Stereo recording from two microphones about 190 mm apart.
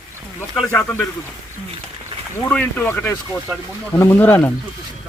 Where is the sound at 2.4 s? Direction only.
10° left (ahead or behind).